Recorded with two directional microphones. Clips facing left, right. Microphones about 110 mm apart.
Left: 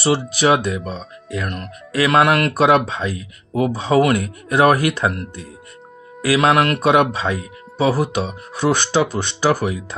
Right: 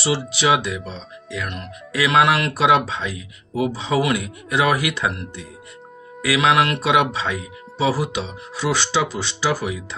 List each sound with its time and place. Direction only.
0.0 s speech: 50° left (ahead or behind)
6.2 s speech: 45° left (ahead or behind)